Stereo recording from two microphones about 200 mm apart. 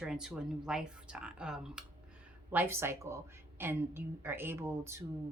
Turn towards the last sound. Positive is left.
turn(degrees=-15)  # may be behind; listen again after turning